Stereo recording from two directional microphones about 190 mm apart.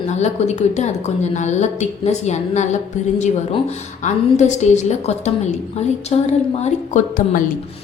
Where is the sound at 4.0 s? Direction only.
40° left (ahead or behind).